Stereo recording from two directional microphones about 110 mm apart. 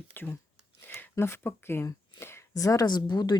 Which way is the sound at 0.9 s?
20° left (ahead or behind).